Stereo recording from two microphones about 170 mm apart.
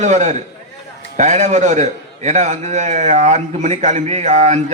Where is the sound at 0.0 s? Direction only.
45° right (ahead or behind).